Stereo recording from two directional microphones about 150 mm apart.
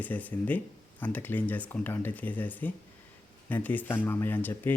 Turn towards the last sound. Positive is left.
turn(degrees=15)  # may be behind; listen again after turning